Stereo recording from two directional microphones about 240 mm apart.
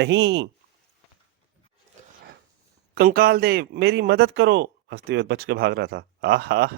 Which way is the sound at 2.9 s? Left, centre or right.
Right.